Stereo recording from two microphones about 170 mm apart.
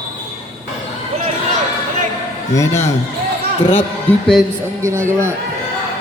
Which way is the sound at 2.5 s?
15° left (ahead or behind).